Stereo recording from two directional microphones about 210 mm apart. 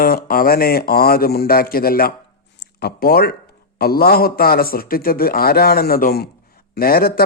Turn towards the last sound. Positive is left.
turn(degrees=45)  # may be behind; listen again after turning